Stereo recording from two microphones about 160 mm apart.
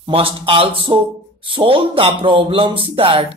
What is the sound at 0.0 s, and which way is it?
Speech, 35° right (ahead or behind).